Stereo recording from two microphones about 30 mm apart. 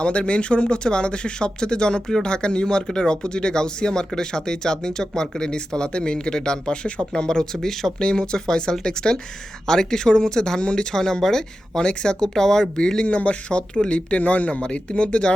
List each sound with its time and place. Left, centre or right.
0.0 s speech: left; by 7.9 s centre
7.9 s speech: left
10.6 s speech: left
10.9 s speech: centre
12.2 s speech: centre
12.7 s speech: left
13.1 s speech: left
14.2 s speech: left
14.6 s speech: left